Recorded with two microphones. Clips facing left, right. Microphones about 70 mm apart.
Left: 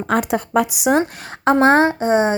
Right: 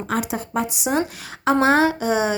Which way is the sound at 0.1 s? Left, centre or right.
Left.